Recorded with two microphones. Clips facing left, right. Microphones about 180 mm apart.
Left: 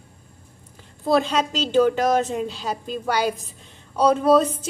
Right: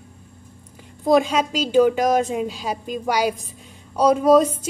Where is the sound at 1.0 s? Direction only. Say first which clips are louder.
Right 3 dB; 10° right (ahead or behind).